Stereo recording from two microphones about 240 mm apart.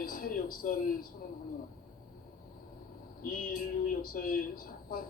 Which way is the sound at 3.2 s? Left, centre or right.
Left.